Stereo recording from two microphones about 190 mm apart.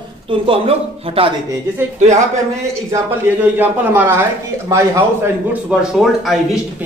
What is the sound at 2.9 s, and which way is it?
A man's voice, 10° right (ahead or behind).